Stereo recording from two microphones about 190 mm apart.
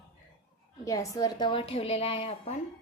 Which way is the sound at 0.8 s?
15° left (ahead or behind).